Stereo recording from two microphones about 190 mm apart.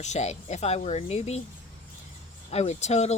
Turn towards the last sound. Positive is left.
turn(degrees=35)  # may be behind; listen again after turning